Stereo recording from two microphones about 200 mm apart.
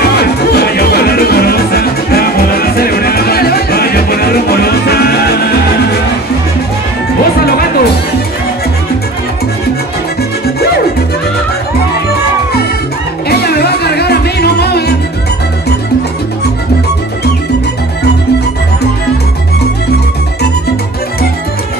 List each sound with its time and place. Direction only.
0.1 s music: 55° left (ahead or behind)
13.3 s music: 50° left (ahead or behind)